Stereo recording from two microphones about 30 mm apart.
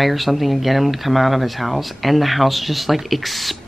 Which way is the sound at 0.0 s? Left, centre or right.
Centre.